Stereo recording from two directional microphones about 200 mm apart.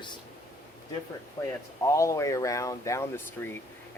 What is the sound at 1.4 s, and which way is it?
Speech, 20° left (ahead or behind).